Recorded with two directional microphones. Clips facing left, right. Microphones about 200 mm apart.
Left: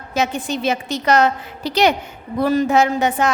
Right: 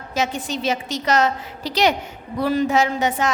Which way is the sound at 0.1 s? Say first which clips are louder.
Left 3 dB; 60° left (ahead or behind).